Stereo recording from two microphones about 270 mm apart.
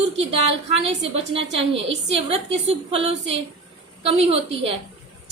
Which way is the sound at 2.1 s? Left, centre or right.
Right.